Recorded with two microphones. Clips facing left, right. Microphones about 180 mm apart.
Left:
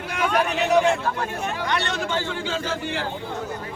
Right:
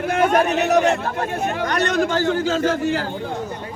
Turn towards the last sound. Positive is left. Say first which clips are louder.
# right 8 dB
turn(degrees=-40)  # may be behind; listen again after turning